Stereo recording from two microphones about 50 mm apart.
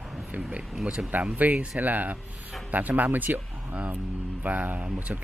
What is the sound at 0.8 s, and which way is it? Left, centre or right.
Speech, centre.